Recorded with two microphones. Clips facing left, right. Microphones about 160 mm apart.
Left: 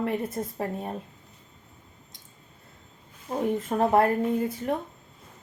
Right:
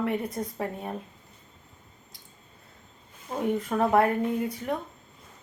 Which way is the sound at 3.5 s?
25° left (ahead or behind).